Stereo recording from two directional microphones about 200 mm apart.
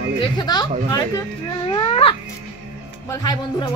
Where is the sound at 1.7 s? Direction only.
30° left (ahead or behind).